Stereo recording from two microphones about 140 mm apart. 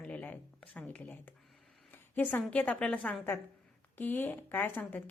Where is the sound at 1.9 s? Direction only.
10° left (ahead or behind).